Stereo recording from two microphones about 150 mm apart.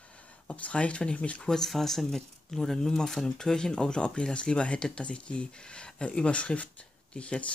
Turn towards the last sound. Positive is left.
turn(degrees=5)  # may be behind; listen again after turning